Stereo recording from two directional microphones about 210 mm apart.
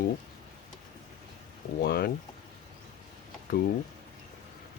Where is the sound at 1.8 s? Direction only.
45° left (ahead or behind).